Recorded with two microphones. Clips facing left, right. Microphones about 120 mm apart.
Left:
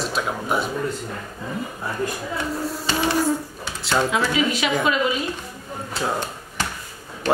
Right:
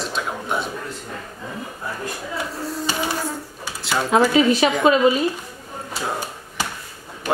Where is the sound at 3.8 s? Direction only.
Centre (ahead or behind).